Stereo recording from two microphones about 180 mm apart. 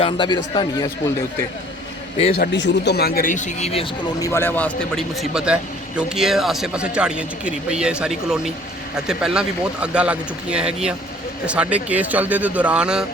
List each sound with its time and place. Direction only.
0.0 s speech: 25° left (ahead or behind)
2.4 s speech: 75° left (ahead or behind); by 3.8 s 35° left (ahead or behind)
4.2 s a man's voice: 15° left (ahead or behind); by 13.1 s 5° right (ahead or behind)